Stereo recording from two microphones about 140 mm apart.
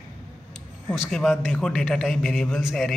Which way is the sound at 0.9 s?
5° left (ahead or behind).